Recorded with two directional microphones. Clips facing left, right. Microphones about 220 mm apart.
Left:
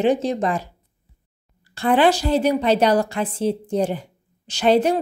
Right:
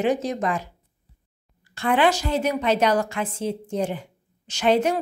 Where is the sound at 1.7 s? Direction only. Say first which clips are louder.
Left 4 dB; 35° left (ahead or behind).